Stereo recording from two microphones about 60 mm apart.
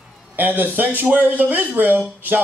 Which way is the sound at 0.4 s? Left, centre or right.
Right.